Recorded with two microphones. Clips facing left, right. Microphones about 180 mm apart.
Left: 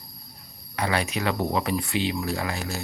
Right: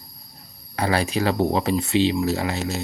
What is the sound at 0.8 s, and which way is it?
Speech, 35° right (ahead or behind).